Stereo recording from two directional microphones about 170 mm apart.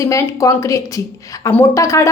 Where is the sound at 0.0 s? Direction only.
20° left (ahead or behind).